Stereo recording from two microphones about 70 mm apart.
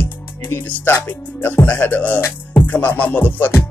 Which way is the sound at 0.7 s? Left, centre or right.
Left.